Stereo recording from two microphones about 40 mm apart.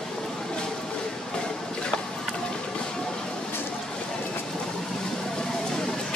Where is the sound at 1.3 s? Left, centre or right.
Centre.